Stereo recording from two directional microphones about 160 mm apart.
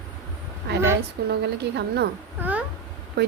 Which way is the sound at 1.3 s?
90° right.